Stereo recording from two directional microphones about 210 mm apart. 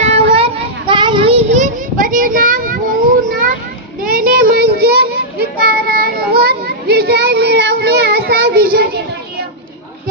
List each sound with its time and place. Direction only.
0.0 s child singing: 30° right (ahead or behind)
1.5 s a sound: 35° right (ahead or behind)
4.0 s child singing: 45° right (ahead or behind)